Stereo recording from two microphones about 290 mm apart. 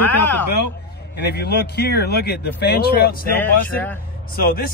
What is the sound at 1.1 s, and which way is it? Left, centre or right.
A man's voice, left.